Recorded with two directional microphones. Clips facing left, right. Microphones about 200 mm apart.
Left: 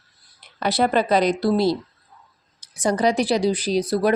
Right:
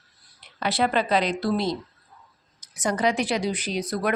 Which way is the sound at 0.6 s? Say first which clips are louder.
Left 4 dB; 40° left (ahead or behind).